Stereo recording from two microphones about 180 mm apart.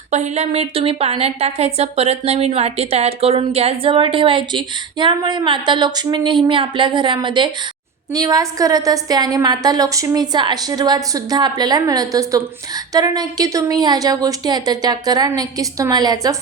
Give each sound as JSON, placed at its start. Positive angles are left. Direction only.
{"t": 0.1, "sound": "a woman's voice", "side_deg": -40}